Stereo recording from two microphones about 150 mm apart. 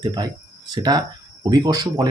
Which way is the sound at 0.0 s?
30° right (ahead or behind).